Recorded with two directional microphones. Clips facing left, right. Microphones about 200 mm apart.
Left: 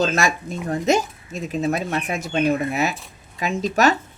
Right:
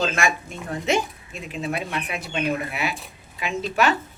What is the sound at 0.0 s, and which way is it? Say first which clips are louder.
Speech: left 3 dB; 40° left (ahead or behind).